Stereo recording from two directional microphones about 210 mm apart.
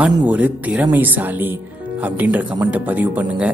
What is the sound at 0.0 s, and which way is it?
Speech, 5° right (ahead or behind).